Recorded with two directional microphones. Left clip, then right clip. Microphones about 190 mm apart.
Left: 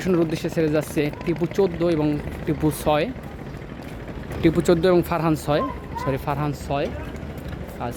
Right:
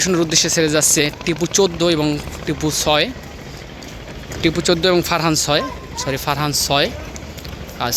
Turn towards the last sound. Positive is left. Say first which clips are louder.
# right 8 dB
turn(degrees=-5)  # may be behind; listen again after turning